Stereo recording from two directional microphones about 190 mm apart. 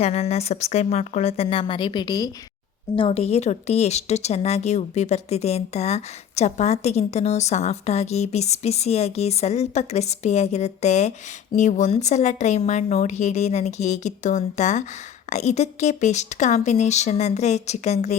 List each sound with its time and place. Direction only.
0.0 s a woman's voice: 35° left (ahead or behind)